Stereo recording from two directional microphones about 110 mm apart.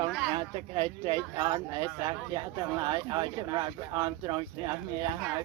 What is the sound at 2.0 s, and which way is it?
Speech, 40° right (ahead or behind).